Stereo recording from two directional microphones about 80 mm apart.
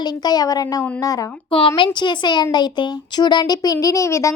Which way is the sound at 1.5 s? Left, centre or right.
Left.